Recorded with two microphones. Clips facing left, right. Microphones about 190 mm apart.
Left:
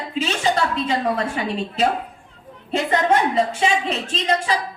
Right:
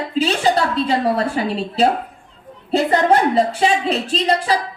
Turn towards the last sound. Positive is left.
turn(degrees=-35)  # may be behind; listen again after turning